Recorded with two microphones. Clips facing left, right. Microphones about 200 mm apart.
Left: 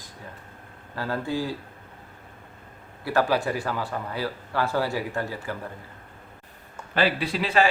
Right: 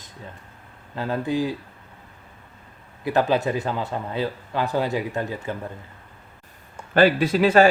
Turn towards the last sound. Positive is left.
turn(degrees=-45)  # may be behind; listen again after turning